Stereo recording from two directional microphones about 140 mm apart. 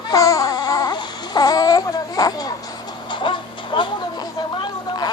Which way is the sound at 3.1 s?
35° left (ahead or behind).